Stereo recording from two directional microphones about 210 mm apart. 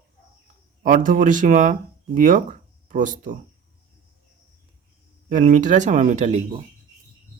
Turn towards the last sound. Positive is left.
turn(degrees=-30)  # may be behind; listen again after turning